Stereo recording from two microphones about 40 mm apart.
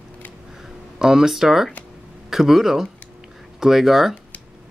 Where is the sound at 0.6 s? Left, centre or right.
Centre.